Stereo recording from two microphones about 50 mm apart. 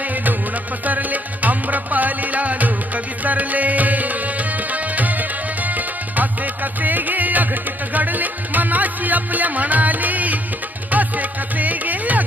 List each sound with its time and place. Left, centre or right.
0.9 s music: right